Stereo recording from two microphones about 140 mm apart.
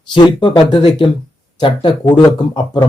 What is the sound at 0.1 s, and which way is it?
Speech, 35° left (ahead or behind).